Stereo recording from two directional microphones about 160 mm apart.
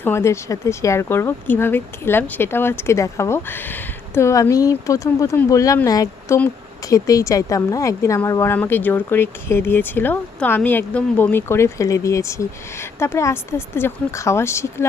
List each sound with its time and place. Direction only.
0.0 s speech: 15° left (ahead or behind)